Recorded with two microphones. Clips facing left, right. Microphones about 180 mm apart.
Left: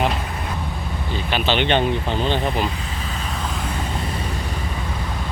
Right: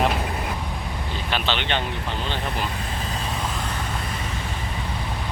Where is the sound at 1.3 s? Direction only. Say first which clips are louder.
Left 6 dB; 15° left (ahead or behind).